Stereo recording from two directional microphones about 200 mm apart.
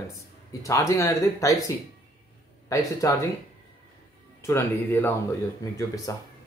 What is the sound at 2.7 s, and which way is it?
Speech, 15° left (ahead or behind).